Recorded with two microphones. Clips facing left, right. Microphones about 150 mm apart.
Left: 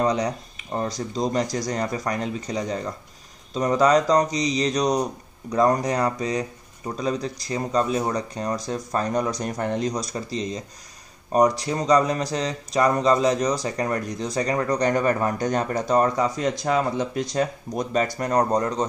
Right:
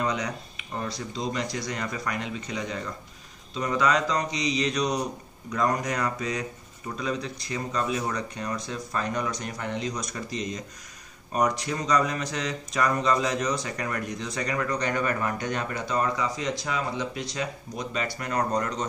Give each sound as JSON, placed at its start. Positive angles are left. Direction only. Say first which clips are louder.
{"t": 0.0, "sound": "speech", "louder": "left 6 dB", "side_deg": 35}